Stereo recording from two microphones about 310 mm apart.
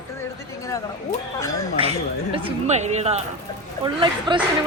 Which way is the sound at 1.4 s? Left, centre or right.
Centre.